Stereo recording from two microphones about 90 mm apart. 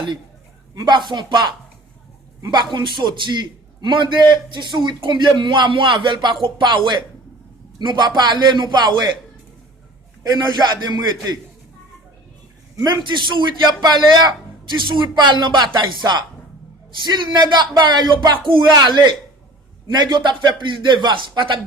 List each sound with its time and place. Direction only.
0.8 s a man's voice: 55° right (ahead or behind)
10.2 s a man's voice: 55° right (ahead or behind)
12.7 s a man's voice: 55° right (ahead or behind)